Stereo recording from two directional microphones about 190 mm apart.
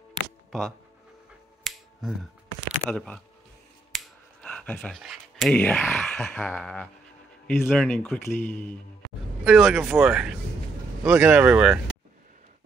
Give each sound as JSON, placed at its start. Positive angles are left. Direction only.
{"t": 0.5, "sound": "speech", "side_deg": 0}
{"t": 1.6, "sound": "finger snapping", "side_deg": 0}
{"t": 2.9, "sound": "speech", "side_deg": 5}
{"t": 9.4, "sound": "speech", "side_deg": 0}